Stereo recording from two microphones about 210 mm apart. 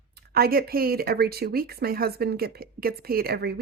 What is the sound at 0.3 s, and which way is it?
Speech, 45° right (ahead or behind).